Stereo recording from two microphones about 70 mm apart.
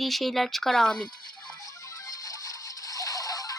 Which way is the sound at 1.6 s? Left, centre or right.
Left.